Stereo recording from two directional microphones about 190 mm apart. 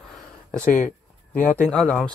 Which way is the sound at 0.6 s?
45° left (ahead or behind).